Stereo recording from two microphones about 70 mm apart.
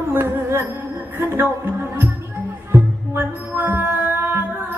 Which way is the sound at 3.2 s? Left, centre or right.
Right.